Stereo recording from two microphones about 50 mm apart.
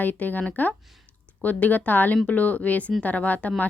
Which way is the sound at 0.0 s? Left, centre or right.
Left.